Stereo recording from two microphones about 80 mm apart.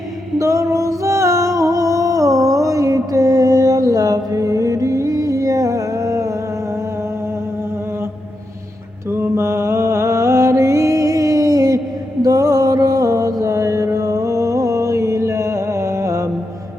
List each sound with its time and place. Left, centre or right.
0.3 s music: right
9.1 s mantra: right